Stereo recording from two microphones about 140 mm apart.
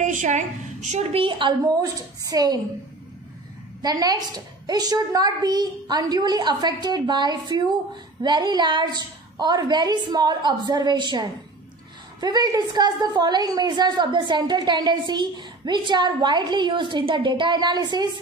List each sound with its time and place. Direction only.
0.0 s a sound: 65° right (ahead or behind)
0.9 s a woman's voice: 40° right (ahead or behind)
1.8 s a woman's voice: 25° right (ahead or behind)
3.8 s a woman's voice: 30° right (ahead or behind)